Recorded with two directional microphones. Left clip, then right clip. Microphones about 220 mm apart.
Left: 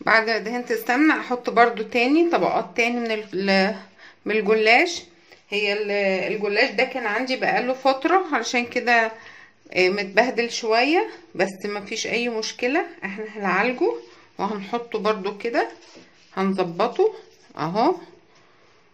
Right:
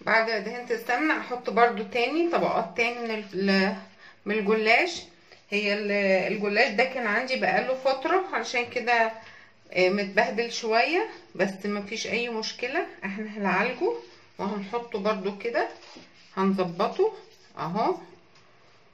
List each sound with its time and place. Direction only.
0.0 s speech: 50° left (ahead or behind)